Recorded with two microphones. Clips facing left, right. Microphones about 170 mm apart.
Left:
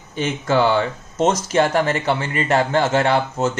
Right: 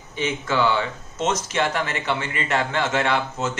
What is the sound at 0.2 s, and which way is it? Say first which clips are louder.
Speech: left 4 dB; 40° left (ahead or behind).